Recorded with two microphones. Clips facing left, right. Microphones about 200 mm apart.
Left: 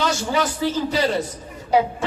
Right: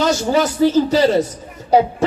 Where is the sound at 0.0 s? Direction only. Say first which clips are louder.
Right 6 dB; 40° right (ahead or behind).